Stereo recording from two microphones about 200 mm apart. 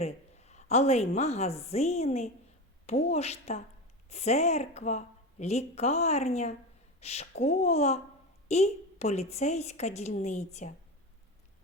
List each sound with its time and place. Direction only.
0.0 s a woman's voice: 35° left (ahead or behind)